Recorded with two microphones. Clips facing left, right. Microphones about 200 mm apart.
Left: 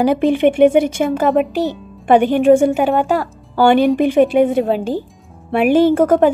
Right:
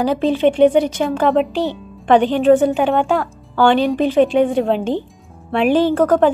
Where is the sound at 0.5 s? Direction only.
10° left (ahead or behind).